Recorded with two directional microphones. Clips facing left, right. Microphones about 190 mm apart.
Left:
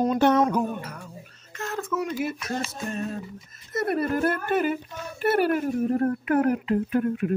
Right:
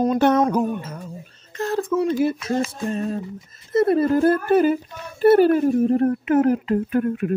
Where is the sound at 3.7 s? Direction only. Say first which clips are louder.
Right 8 dB; 25° right (ahead or behind).